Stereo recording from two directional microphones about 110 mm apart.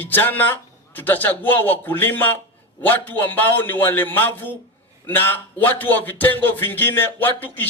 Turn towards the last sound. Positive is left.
turn(degrees=20)  # may be behind; listen again after turning